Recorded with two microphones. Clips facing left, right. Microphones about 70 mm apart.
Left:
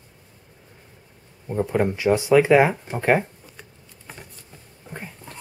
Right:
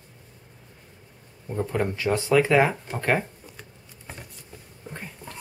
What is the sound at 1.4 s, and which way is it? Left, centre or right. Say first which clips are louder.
Speech: left 4 dB; centre.